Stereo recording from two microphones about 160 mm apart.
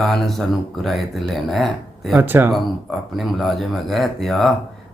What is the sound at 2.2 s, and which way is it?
Speech, 10° right (ahead or behind).